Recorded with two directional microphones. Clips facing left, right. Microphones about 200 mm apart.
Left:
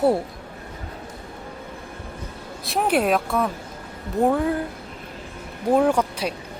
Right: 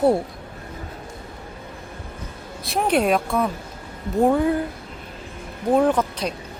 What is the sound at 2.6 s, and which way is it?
Speech, centre (ahead or behind).